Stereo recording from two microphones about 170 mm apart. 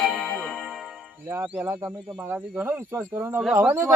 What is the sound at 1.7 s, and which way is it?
A man's voice, 15° right (ahead or behind).